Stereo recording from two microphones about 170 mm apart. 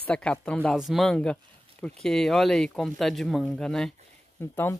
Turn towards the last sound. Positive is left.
turn(degrees=10)  # may be behind; listen again after turning